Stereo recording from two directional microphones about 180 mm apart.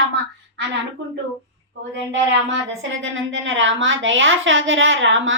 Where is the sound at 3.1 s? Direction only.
90° right.